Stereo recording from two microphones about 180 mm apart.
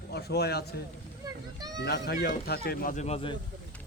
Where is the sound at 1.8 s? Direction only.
65° left (ahead or behind).